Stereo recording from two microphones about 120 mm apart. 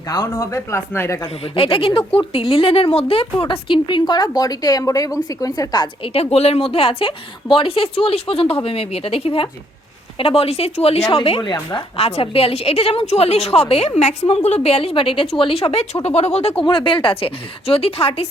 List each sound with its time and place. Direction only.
0.1 s speech: 30° left (ahead or behind)
1.5 s a woman's voice: 50° left (ahead or behind)
6.1 s a woman's voice: 55° left (ahead or behind)
11.2 s speech: 45° left (ahead or behind)
11.9 s a woman's voice: 55° left (ahead or behind)
16.6 s speech: 45° left (ahead or behind)